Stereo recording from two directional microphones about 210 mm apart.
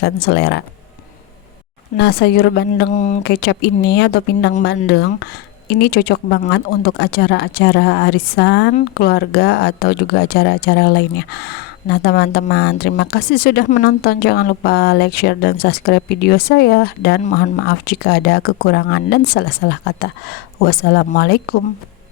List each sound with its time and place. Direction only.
0.0 s speech: 55° left (ahead or behind)
2.0 s speech: 50° left (ahead or behind)
2.9 s speech: 35° left (ahead or behind)
3.2 s speech: 50° left (ahead or behind)